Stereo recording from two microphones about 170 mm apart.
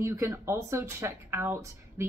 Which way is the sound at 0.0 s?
20° right (ahead or behind).